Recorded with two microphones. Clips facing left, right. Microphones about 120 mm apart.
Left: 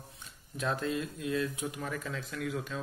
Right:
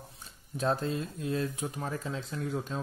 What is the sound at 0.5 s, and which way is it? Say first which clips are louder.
Speech: right 2 dB; 35° right (ahead or behind).